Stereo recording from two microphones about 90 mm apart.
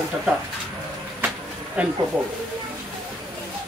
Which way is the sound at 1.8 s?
15° right (ahead or behind).